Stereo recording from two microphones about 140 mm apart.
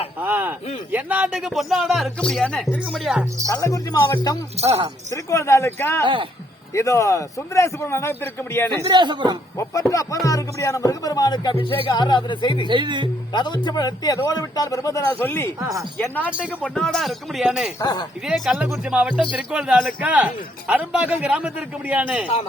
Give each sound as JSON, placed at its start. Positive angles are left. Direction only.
{"t": 0.2, "sound": "speech", "side_deg": -15}
{"t": 3.5, "sound": "a man's voice", "side_deg": 20}
{"t": 4.6, "sound": "speech", "side_deg": -50}
{"t": 5.1, "sound": "a man's voice", "side_deg": 20}
{"t": 8.9, "sound": "speech", "side_deg": -35}
{"t": 9.9, "sound": "a man's voice", "side_deg": 25}
{"t": 12.6, "sound": "speech", "side_deg": -35}
{"t": 13.3, "sound": "a man's voice", "side_deg": 30}
{"t": 17.7, "sound": "a man's voice", "side_deg": 30}
{"t": 18.3, "sound": "speech", "side_deg": 0}